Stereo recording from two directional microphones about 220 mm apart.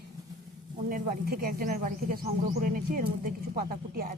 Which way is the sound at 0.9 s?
40° right (ahead or behind).